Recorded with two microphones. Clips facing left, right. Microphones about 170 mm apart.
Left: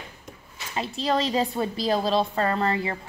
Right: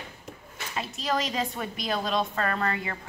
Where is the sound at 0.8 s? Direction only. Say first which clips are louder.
Left 4 dB; 30° left (ahead or behind).